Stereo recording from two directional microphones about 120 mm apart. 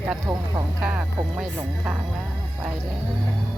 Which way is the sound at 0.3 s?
35° right (ahead or behind).